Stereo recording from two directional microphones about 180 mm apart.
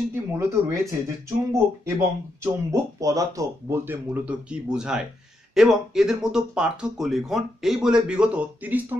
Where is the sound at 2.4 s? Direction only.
20° right (ahead or behind).